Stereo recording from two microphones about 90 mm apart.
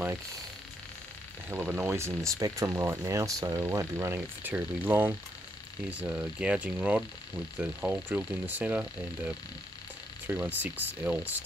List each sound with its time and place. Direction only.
1.5 s speech: 25° right (ahead or behind)